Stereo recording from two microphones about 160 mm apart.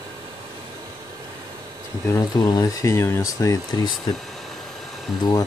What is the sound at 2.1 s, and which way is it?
Speech, 20° left (ahead or behind).